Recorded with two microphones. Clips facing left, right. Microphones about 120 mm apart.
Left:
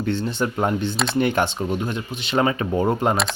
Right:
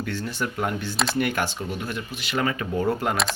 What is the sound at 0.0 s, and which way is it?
Speech, 25° left (ahead or behind).